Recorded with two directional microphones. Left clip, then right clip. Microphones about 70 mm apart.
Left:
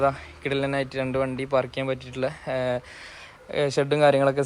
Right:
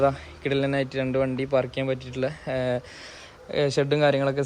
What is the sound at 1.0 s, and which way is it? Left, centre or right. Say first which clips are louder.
Speech: right 1 dB; centre.